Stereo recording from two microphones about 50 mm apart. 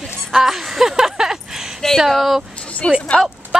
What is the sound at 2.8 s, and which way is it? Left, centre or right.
Speech, left.